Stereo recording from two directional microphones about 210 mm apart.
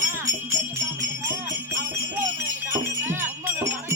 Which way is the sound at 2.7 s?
10° right (ahead or behind).